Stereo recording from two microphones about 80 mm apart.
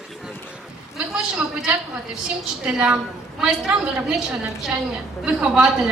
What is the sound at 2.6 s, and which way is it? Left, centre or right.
A woman's voice, centre.